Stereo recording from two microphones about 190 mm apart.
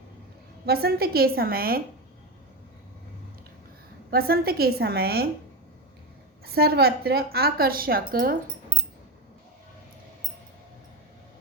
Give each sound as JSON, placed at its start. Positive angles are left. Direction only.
{"t": 0.6, "sound": "a woman's voice", "side_deg": -55}
{"t": 4.1, "sound": "a woman's voice", "side_deg": -50}
{"t": 6.4, "sound": "a woman's voice", "side_deg": -55}